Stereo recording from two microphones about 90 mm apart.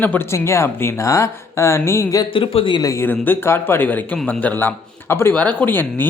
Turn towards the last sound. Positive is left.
turn(degrees=20)  # may be behind; listen again after turning